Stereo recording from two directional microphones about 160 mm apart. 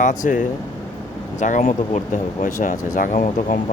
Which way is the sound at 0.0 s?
50° left (ahead or behind).